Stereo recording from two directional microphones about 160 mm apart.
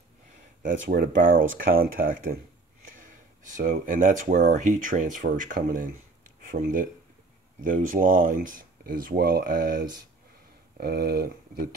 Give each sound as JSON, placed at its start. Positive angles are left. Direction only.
{"t": 0.6, "sound": "speech", "side_deg": -60}
{"t": 3.5, "sound": "speech", "side_deg": -55}